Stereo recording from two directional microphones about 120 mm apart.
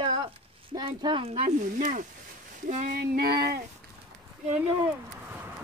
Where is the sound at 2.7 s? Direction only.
85° right.